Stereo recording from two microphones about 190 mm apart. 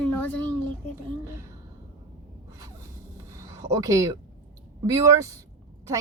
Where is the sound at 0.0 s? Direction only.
10° left (ahead or behind).